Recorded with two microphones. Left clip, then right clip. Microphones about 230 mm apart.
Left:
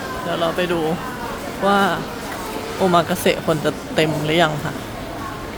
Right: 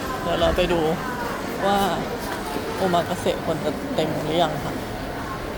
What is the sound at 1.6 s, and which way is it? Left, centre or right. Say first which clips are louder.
Speech: left 5 dB; left.